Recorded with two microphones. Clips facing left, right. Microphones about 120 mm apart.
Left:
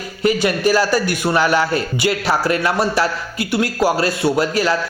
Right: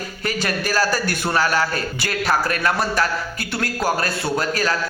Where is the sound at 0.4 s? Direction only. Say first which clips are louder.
Left 2 dB; 20° left (ahead or behind).